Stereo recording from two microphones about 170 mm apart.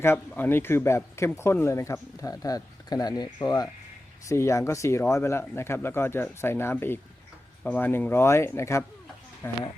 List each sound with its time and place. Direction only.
0.0 s speech: 15° left (ahead or behind)